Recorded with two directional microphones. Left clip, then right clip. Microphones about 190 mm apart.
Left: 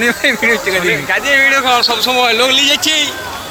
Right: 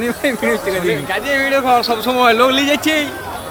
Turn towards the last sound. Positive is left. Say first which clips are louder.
# left 4 dB
turn(degrees=-50)  # may be behind; listen again after turning